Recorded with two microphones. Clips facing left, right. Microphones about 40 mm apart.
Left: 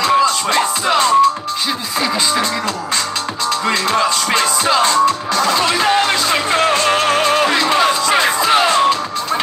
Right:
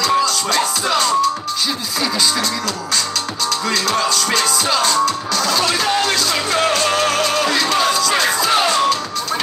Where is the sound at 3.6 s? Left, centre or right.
Left.